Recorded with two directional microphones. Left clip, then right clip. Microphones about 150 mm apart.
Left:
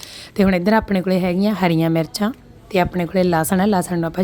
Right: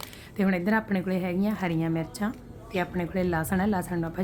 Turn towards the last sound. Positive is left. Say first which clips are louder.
# left 10 dB
turn(degrees=45)  # may be behind; listen again after turning